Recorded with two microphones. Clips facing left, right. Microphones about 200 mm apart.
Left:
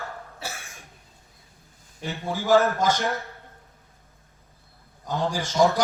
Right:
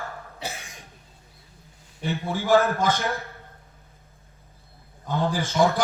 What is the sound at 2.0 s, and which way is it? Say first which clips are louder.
A man's voice: right 1 dB; 45° left (ahead or behind).